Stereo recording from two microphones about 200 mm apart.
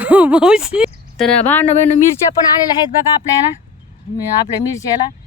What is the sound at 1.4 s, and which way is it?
Speech, 10° left (ahead or behind).